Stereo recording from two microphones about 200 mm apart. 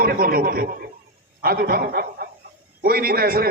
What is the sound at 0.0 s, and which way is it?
A man's voice, 50° right (ahead or behind).